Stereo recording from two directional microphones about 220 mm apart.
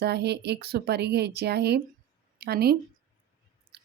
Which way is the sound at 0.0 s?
50° right (ahead or behind).